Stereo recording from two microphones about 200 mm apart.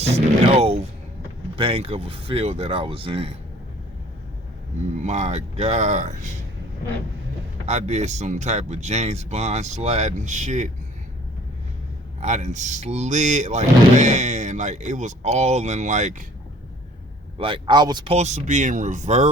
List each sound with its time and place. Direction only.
0.0 s speech: 30° right (ahead or behind)
5.0 s speech: 35° right (ahead or behind)
7.7 s speech: 35° right (ahead or behind)
12.2 s speech: 35° right (ahead or behind)
17.3 s speech: 25° right (ahead or behind)